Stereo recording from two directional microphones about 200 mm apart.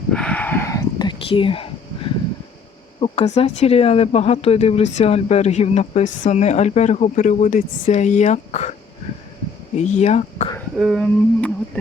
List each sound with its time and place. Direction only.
0.1 s whispering: 5° left (ahead or behind); by 1.7 s 25° left (ahead or behind)
3.0 s speech: 30° left (ahead or behind)
10.0 s speech: 35° left (ahead or behind)
10.8 s a sound: centre (ahead or behind)